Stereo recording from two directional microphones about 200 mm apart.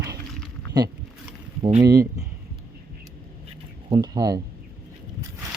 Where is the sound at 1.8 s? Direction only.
15° right (ahead or behind).